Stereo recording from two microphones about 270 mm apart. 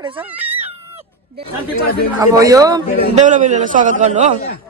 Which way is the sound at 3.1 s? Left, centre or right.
Right.